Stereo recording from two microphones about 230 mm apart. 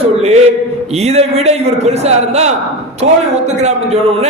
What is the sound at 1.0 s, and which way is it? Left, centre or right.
A man's voice, right.